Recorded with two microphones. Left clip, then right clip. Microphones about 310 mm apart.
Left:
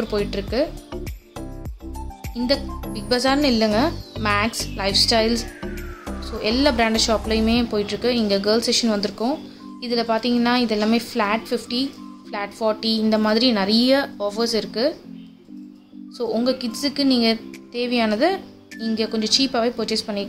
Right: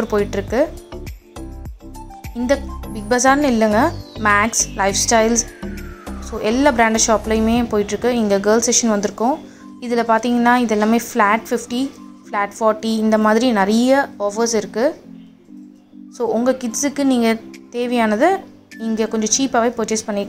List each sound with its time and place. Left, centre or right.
0.0 s speech: centre
2.3 s speech: centre
16.2 s speech: centre